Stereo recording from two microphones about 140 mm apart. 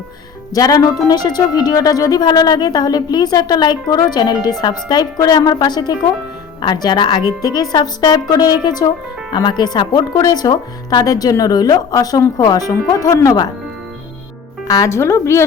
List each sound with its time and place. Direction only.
0.5 s a woman's voice: 30° left (ahead or behind)
14.7 s speech: 20° left (ahead or behind)